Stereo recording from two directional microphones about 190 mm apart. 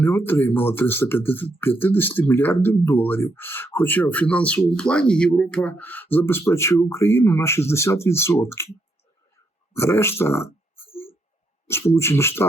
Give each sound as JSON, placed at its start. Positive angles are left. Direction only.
{"t": 0.0, "sound": "speech", "side_deg": 10}
{"t": 9.7, "sound": "speech", "side_deg": 15}
{"t": 10.8, "sound": "a sound", "side_deg": 30}
{"t": 11.9, "sound": "speech", "side_deg": 15}